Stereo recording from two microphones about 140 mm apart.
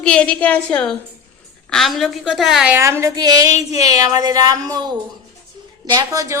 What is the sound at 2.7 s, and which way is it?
Speech, 20° right (ahead or behind).